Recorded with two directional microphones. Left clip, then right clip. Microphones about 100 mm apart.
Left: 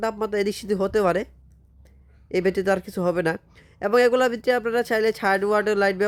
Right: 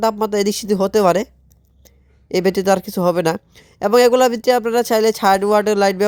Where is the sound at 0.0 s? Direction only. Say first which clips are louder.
Right 7 dB; 35° right (ahead or behind).